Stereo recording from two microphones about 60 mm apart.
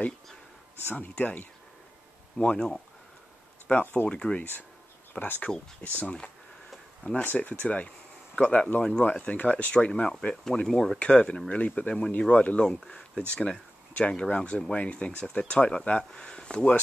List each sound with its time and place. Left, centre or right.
0.9 s speech: left
2.3 s speech: centre
3.7 s speech: left
4.1 s speech: centre
5.2 s speech: left
8.7 s speech: centre
9.0 s speech: left